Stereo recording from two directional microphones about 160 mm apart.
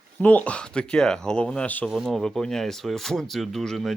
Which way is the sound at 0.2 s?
10° left (ahead or behind).